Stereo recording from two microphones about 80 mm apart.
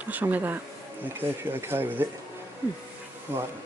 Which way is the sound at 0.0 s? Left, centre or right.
Right.